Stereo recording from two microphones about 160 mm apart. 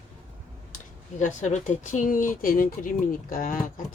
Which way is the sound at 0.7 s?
50° left (ahead or behind).